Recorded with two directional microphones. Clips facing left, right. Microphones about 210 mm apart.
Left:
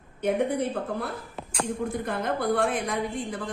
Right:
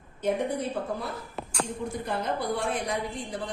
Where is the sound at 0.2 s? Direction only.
55° left (ahead or behind).